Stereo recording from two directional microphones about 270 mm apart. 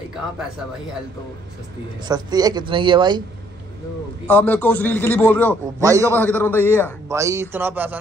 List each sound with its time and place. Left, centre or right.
2.0 s speech: centre
4.3 s a man's voice: centre
5.8 s speech: centre
6.1 s a man's voice: centre
7.1 s speech: centre